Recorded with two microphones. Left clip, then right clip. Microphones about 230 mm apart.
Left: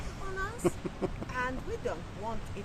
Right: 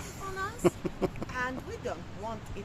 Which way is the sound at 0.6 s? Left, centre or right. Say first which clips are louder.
Right 5 dB; right.